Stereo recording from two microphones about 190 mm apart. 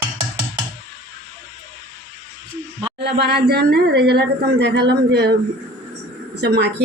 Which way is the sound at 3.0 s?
60° right (ahead or behind).